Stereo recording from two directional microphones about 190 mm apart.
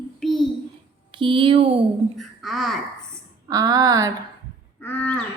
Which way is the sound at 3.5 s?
20° right (ahead or behind).